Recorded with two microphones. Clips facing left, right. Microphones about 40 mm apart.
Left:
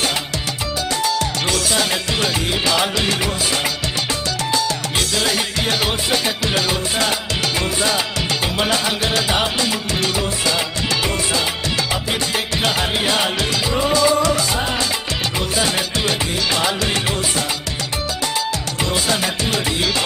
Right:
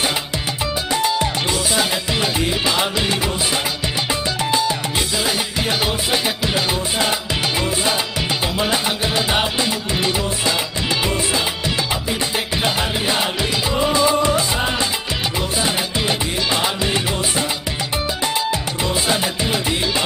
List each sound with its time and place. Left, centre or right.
1.0 s music: centre
5.6 s music: centre
8.6 s music: centre
12.6 s music: centre
13.9 s music: right
18.9 s music: centre